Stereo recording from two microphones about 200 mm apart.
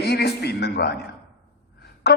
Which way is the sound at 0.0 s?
55° left (ahead or behind).